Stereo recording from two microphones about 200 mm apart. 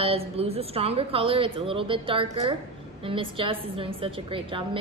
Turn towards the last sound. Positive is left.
turn(degrees=-25)  # may be behind; listen again after turning